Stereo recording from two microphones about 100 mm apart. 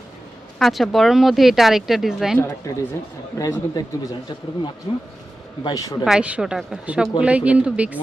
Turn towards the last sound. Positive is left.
turn(degrees=-15)  # may be behind; listen again after turning